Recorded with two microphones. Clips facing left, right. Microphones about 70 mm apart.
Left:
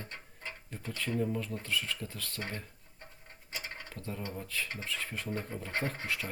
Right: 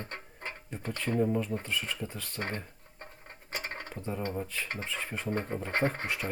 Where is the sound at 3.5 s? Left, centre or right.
Right.